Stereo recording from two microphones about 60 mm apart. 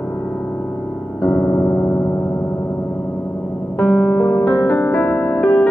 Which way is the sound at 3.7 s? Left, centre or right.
Left.